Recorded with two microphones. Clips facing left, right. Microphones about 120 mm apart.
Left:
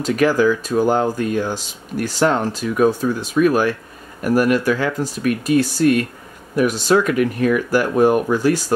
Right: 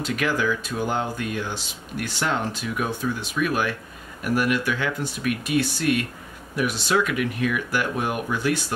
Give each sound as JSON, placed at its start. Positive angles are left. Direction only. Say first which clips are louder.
{"t": 0.0, "sound": "speech", "louder": "left 9 dB", "side_deg": 40}